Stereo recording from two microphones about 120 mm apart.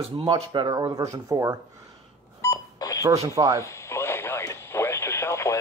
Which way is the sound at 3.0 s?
25° right (ahead or behind).